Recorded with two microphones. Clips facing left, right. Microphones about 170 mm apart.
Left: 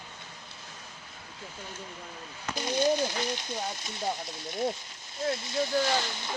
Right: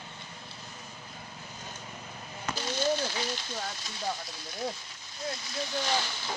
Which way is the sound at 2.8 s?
15° left (ahead or behind).